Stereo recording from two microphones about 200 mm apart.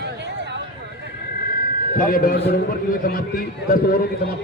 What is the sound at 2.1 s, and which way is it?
A man's voice, 45° left (ahead or behind).